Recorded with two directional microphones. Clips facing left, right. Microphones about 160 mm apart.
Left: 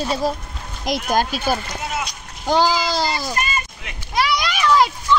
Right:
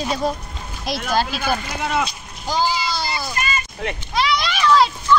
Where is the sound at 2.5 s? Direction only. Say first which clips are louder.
Left 4 dB; 85° left.